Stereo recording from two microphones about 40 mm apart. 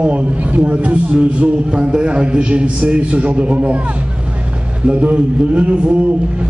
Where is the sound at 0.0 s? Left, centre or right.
Right.